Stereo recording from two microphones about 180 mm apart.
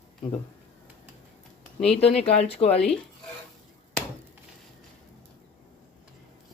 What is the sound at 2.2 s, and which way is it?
Speech, 35° left (ahead or behind).